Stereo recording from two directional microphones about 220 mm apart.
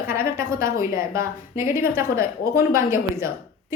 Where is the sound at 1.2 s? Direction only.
40° left (ahead or behind).